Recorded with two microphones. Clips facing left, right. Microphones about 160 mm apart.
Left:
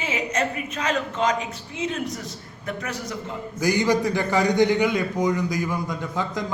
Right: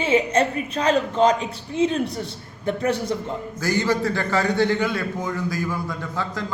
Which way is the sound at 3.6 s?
15° left (ahead or behind).